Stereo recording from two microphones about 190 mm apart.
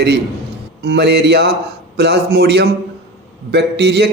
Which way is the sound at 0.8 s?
60° right (ahead or behind).